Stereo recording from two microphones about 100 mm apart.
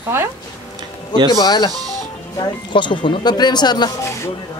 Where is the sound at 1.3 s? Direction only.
40° left (ahead or behind).